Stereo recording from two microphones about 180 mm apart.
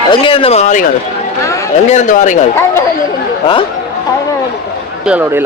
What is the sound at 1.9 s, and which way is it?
Speech, 45° left (ahead or behind).